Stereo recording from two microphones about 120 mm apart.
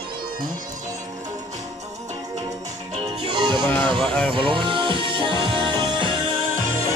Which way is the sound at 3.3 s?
40° right (ahead or behind).